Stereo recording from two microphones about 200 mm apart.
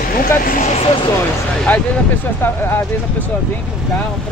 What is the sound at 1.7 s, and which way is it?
Speech, 10° left (ahead or behind).